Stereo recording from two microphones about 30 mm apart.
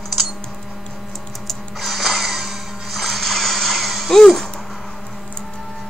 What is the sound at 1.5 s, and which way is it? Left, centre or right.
Music, centre.